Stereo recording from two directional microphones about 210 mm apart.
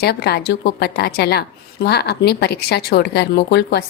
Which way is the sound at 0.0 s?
50° left (ahead or behind).